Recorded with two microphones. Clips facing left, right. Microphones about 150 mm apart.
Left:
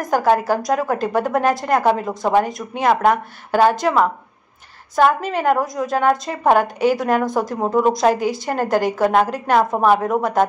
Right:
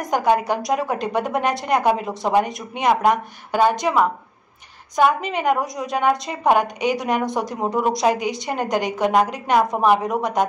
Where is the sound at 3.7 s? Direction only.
15° right (ahead or behind).